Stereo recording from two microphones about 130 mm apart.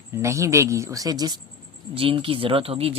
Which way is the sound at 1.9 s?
45° right (ahead or behind).